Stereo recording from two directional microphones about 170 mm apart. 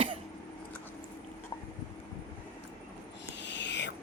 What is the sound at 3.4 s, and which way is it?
Owl, 90° left.